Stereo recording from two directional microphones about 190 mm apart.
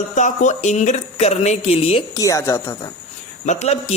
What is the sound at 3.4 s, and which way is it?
Speech, 35° left (ahead or behind).